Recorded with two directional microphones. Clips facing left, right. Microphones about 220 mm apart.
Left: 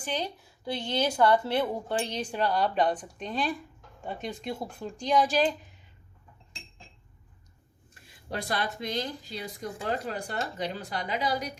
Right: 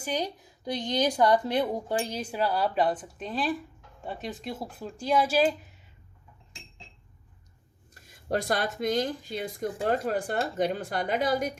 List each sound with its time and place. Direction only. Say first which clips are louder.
0.0 s a woman's voice: right 2 dB; 10° right (ahead or behind)
7.9 s speech: right 7 dB; 45° right (ahead or behind)